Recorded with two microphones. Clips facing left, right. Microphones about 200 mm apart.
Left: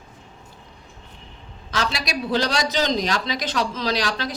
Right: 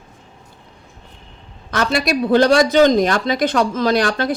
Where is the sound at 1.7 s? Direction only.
55° right (ahead or behind).